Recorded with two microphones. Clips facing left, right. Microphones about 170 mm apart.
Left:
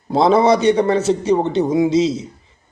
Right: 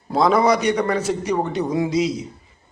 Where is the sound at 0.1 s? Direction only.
30° left (ahead or behind).